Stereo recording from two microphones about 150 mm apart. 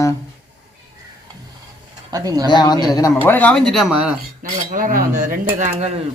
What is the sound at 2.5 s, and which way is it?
Speech, 30° left (ahead or behind).